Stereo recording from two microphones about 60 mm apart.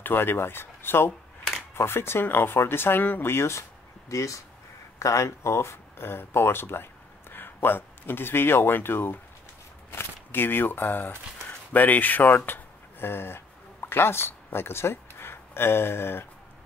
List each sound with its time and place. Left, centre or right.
0.0 s speech: left
4.1 s speech: left